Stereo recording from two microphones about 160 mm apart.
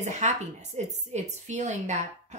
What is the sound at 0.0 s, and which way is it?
A woman's voice, 45° right (ahead or behind).